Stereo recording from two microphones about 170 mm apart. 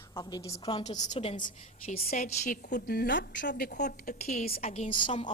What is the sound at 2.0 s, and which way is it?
A woman's voice, 45° left (ahead or behind).